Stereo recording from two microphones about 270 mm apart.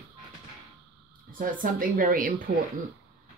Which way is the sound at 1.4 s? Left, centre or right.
Right.